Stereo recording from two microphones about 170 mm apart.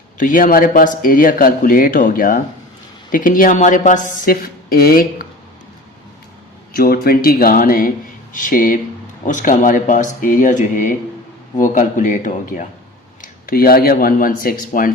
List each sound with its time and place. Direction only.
0.2 s speech: 50° left (ahead or behind)
6.7 s speech: 65° left (ahead or behind); by 12.6 s 45° left (ahead or behind)
13.2 s speech: 60° left (ahead or behind)